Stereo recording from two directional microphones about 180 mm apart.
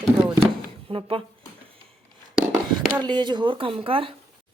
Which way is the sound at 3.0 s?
25° right (ahead or behind).